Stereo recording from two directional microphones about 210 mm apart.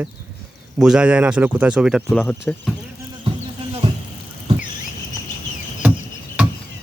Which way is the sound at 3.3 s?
25° right (ahead or behind).